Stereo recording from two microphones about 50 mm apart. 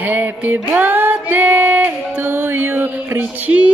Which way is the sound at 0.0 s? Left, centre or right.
Right.